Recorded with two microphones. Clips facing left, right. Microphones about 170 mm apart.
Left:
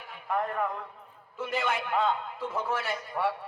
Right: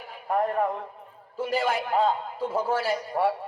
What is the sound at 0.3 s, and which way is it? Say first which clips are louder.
A man's voice: right 5 dB; 35° right (ahead or behind).